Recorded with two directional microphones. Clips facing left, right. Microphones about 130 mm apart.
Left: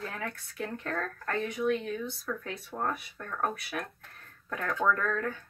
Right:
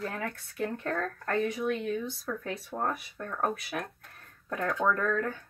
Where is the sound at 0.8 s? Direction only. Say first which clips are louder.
Right 2 dB; 30° right (ahead or behind).